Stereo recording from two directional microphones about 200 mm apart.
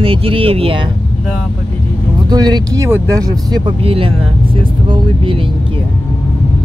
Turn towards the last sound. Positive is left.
turn(degrees=-25)  # may be behind; listen again after turning